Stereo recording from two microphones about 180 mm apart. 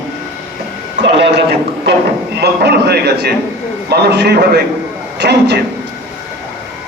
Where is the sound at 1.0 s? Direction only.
75° right (ahead or behind).